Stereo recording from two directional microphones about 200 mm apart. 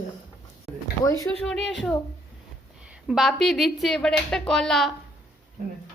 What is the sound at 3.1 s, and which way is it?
A woman's voice, centre (ahead or behind).